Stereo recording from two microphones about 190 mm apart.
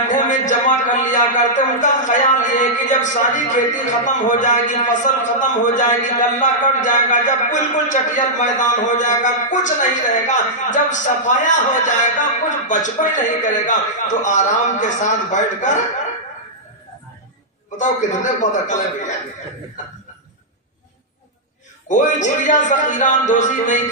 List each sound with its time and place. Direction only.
0.1 s a man's voice: 40° left (ahead or behind)
17.7 s a man's voice: 40° left (ahead or behind)
21.8 s a man's voice: 40° left (ahead or behind)